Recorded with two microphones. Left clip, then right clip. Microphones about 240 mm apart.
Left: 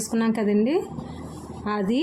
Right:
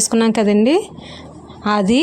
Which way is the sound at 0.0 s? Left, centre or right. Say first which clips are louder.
Right 9 dB; right.